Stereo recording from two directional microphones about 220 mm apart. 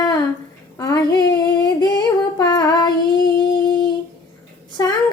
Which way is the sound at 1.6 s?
20° left (ahead or behind).